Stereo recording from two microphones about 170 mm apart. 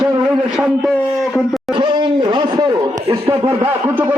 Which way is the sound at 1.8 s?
25° right (ahead or behind).